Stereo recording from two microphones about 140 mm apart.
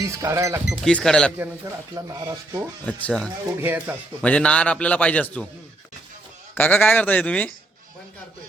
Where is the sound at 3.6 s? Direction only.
15° right (ahead or behind).